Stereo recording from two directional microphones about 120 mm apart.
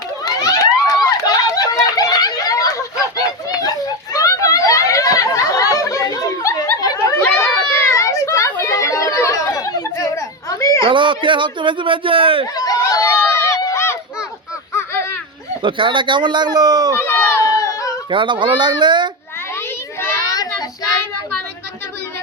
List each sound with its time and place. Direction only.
0.3 s a sound: 30° left (ahead or behind)
10.8 s speech: 45° right (ahead or behind)
12.5 s a sound: 30° left (ahead or behind)
15.6 s speech: 45° right (ahead or behind)
17.0 s run: 20° left (ahead or behind)
18.1 s speech: 45° right (ahead or behind)
20.2 s child singing: 30° left (ahead or behind)